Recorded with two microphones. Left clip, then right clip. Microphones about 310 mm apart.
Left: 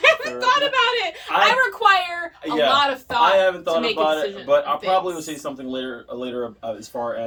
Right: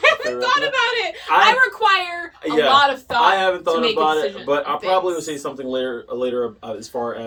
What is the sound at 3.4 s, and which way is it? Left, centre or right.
Speech, centre.